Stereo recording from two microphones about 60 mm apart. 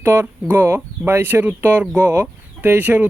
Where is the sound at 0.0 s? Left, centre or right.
Right.